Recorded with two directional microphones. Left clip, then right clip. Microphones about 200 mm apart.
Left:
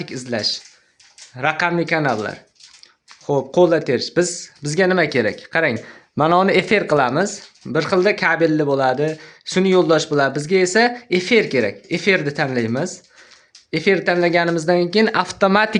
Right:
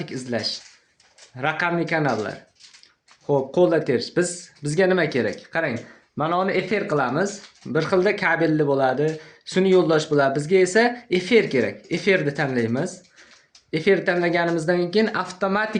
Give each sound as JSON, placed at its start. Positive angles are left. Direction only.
{"t": 0.0, "sound": "speech", "side_deg": 30}
{"t": 6.1, "sound": "speech", "side_deg": 65}